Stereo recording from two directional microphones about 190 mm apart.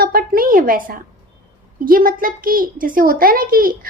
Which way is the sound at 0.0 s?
50° right (ahead or behind).